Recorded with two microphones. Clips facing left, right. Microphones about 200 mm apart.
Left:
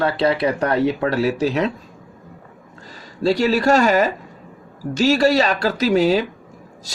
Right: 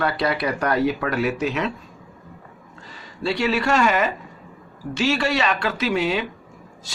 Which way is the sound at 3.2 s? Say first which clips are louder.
Left 5 dB; 40° left (ahead or behind).